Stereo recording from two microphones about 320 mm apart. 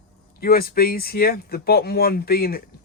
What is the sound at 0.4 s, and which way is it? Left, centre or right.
Speech, left.